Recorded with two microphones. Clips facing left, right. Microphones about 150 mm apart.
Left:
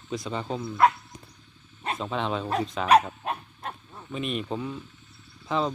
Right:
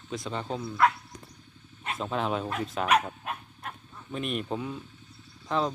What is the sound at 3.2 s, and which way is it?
Dog, 30° left (ahead or behind).